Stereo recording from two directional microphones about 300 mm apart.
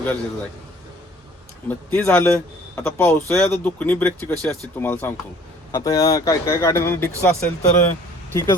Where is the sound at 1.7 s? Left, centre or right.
Centre.